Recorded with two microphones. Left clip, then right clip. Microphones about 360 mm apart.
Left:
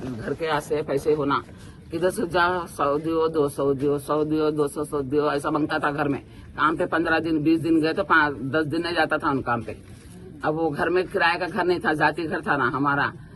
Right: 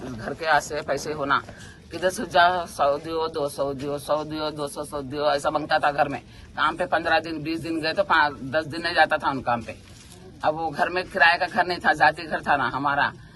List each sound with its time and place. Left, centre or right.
0.4 s speech: centre
10.8 s speech: centre